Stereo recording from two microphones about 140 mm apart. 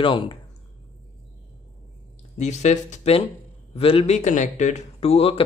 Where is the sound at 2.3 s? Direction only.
55° left (ahead or behind).